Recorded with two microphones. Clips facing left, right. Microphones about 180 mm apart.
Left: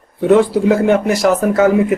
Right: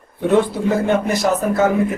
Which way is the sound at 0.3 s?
90° left.